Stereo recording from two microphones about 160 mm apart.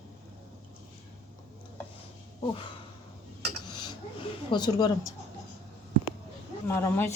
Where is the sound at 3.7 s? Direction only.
25° left (ahead or behind).